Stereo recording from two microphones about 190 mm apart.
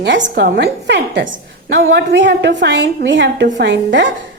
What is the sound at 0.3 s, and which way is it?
A woman's voice, 60° right (ahead or behind).